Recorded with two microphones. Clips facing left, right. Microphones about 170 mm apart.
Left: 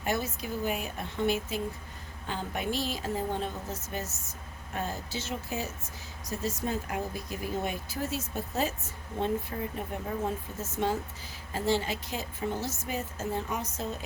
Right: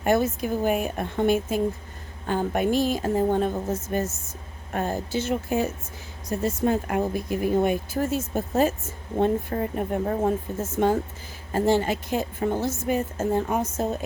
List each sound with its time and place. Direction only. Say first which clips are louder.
0.0 s a woman's voice: right 10 dB; 50° right (ahead or behind)